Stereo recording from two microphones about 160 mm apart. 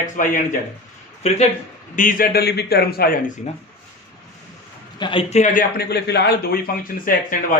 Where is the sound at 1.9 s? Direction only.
55° left (ahead or behind).